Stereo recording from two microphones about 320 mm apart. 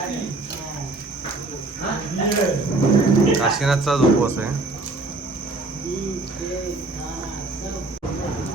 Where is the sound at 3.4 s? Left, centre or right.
Centre.